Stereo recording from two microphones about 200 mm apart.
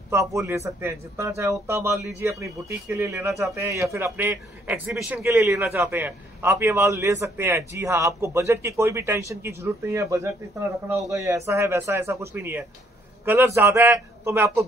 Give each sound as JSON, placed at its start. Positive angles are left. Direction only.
{"t": 0.1, "sound": "speech", "side_deg": -15}